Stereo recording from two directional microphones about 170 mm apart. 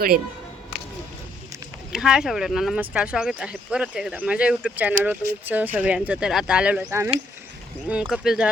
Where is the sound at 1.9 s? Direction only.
5° right (ahead or behind).